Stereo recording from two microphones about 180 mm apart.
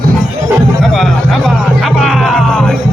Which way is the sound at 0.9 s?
Centre (ahead or behind).